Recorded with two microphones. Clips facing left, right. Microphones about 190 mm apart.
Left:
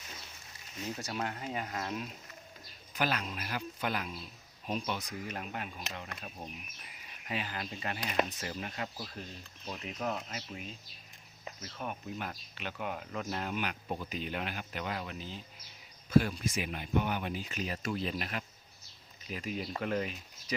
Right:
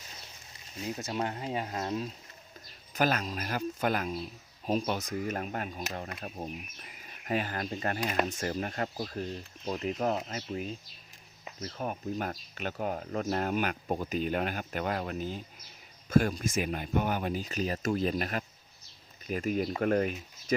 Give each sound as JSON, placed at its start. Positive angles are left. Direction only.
{"t": 0.9, "sound": "speech", "side_deg": -20}
{"t": 2.9, "sound": "speech", "side_deg": -45}